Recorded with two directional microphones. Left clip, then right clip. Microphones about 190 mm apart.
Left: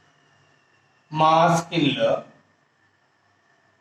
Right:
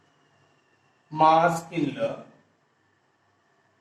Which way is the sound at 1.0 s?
15° left (ahead or behind).